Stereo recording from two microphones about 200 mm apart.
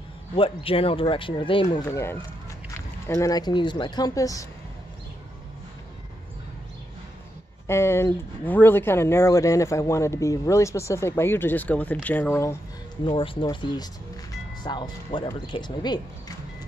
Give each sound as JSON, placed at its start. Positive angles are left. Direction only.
{"t": 0.4, "sound": "speech", "side_deg": 25}
{"t": 1.9, "sound": "speech", "side_deg": 10}
{"t": 7.6, "sound": "speech", "side_deg": 15}
{"t": 13.0, "sound": "speech", "side_deg": 25}